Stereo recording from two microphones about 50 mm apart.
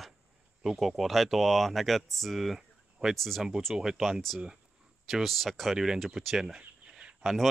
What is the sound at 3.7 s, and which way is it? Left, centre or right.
Speech, centre.